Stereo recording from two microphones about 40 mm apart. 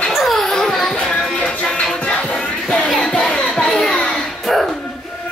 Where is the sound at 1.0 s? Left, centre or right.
Centre.